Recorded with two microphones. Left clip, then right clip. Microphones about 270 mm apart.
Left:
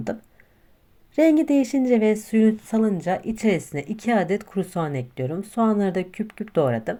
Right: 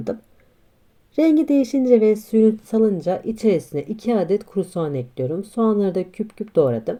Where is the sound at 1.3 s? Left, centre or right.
Centre.